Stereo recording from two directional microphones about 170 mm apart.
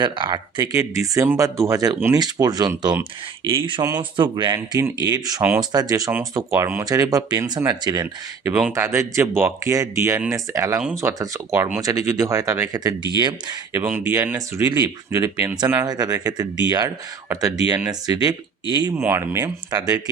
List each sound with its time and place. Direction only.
0.0 s speech: 25° right (ahead or behind)
13.8 s speech: 10° right (ahead or behind)